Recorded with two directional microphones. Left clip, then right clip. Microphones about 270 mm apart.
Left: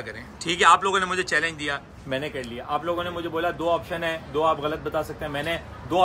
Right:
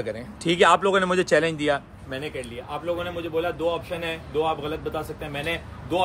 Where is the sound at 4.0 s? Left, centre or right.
Centre.